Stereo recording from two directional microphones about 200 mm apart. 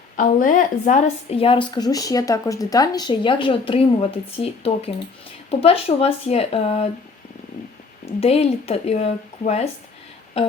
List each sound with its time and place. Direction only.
0.2 s a woman's voice: 40° left (ahead or behind)
8.0 s speech: 30° left (ahead or behind)